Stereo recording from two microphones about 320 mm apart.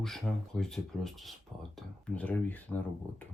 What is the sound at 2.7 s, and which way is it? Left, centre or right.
Speech, centre.